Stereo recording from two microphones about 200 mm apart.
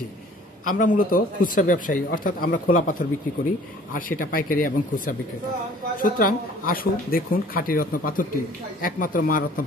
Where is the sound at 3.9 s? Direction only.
45° left (ahead or behind).